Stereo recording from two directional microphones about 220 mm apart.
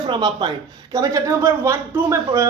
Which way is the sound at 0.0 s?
20° right (ahead or behind).